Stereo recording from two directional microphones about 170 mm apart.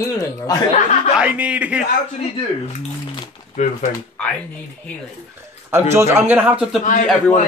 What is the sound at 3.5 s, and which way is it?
Speech, 45° left (ahead or behind).